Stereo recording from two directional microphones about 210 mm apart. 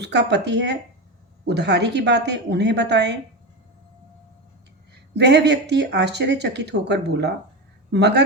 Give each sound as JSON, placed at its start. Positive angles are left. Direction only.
{"t": 0.0, "sound": "speech", "side_deg": -55}
{"t": 5.1, "sound": "speech", "side_deg": -55}